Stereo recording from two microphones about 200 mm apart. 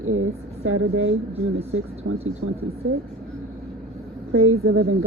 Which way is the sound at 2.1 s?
85° right.